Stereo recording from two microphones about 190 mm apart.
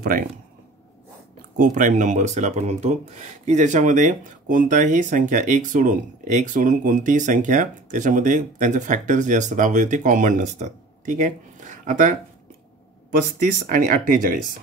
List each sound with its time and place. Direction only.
1.6 s speech: 45° right (ahead or behind)
13.4 s speech: 45° right (ahead or behind)